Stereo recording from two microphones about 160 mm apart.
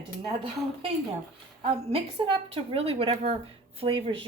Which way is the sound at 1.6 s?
35° right (ahead or behind).